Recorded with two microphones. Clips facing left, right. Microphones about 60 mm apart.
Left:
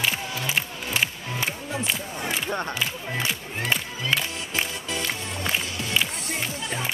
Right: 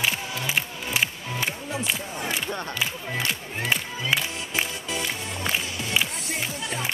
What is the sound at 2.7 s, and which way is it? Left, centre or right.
Music, centre.